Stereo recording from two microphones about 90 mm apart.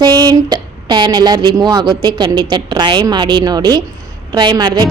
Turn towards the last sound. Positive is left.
turn(degrees=-50)  # may be behind; listen again after turning